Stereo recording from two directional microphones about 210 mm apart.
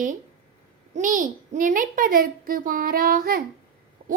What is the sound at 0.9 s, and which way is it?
A child's voice, 35° right (ahead or behind).